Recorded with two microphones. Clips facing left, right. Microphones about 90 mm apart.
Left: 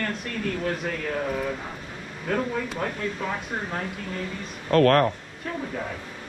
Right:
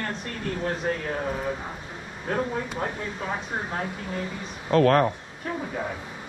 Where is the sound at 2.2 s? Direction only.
20° right (ahead or behind).